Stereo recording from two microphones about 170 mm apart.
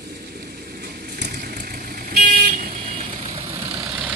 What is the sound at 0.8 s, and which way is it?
Vehicle, 75° right (ahead or behind).